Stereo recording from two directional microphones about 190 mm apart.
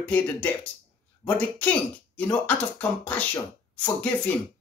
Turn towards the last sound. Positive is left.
turn(degrees=5)  # may be behind; listen again after turning